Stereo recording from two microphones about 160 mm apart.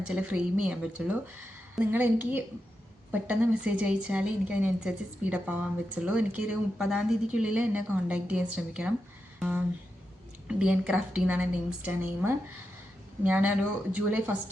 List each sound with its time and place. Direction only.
0.0 s a woman's voice: 5° right (ahead or behind)